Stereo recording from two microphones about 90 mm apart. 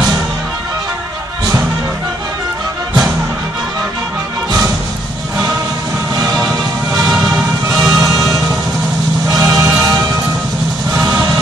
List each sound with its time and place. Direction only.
6.1 s music: 45° right (ahead or behind)
9.3 s music: 40° right (ahead or behind)